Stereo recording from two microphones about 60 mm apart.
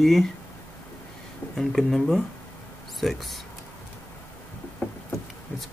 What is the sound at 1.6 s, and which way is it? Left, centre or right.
Speech, centre.